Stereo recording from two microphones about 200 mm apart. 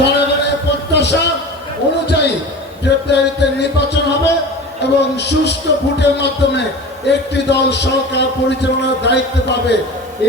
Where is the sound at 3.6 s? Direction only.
60° left (ahead or behind).